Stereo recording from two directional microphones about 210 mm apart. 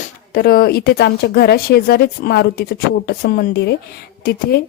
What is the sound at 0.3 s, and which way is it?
A woman's voice, 45° left (ahead or behind).